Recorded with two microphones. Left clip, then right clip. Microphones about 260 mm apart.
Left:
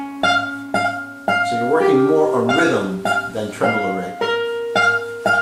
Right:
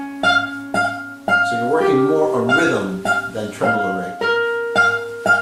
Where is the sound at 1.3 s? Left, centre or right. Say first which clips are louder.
Right 1 dB; centre.